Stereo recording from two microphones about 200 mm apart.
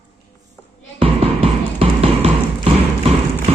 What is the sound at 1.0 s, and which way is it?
Music, 30° right (ahead or behind).